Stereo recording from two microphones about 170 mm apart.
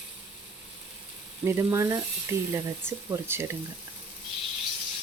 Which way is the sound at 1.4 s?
15° right (ahead or behind).